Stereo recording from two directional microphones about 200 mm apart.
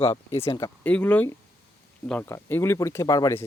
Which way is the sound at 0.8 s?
5° left (ahead or behind).